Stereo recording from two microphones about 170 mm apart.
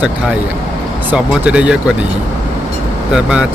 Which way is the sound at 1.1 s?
5° right (ahead or behind).